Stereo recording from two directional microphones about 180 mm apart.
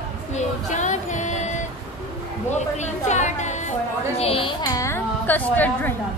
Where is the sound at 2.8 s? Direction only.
40° left (ahead or behind); by 5.9 s 10° left (ahead or behind).